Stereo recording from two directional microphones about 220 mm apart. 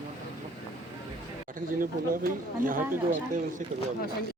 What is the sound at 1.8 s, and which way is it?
Speech, 40° right (ahead or behind).